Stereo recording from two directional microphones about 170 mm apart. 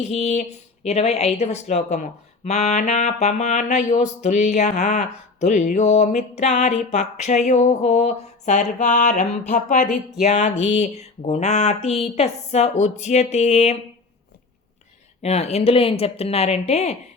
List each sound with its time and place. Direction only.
0.0 s a woman's voice: 40° left (ahead or behind)
15.2 s a woman's voice: 40° left (ahead or behind)